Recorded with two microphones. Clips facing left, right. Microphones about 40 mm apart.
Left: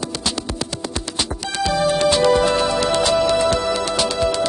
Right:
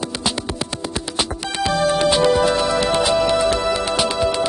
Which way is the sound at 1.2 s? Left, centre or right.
Centre.